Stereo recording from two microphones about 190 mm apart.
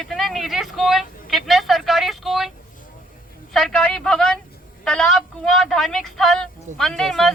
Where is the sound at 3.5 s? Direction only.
5° left (ahead or behind).